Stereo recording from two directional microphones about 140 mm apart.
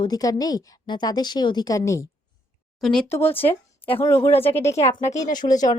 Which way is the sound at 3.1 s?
15° left (ahead or behind).